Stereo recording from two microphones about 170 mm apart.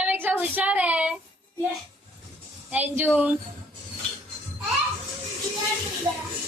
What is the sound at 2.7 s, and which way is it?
Speech, 10° right (ahead or behind).